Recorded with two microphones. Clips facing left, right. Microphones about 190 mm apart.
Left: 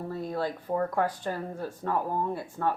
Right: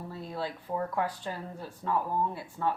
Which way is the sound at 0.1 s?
50° left (ahead or behind).